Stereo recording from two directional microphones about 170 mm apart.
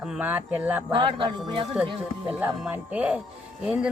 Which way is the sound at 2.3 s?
10° right (ahead or behind).